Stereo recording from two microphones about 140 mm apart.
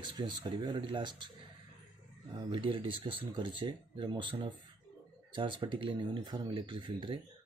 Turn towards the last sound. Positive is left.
turn(degrees=-35)  # may be behind; listen again after turning